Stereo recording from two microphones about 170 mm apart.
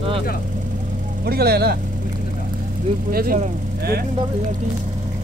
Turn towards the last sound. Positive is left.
turn(degrees=-60)  # may be behind; listen again after turning